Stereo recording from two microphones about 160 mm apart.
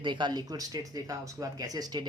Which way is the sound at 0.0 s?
30° right (ahead or behind).